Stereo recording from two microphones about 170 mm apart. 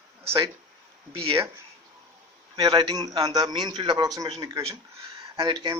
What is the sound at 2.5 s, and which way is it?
A man's voice, 25° right (ahead or behind).